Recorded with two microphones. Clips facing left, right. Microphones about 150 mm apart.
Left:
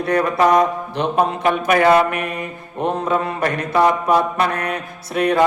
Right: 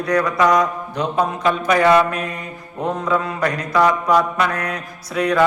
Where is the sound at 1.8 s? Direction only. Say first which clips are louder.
Even; 25° left (ahead or behind).